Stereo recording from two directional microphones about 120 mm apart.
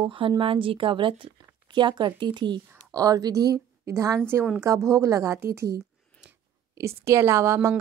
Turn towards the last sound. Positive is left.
turn(degrees=-25)  # may be behind; listen again after turning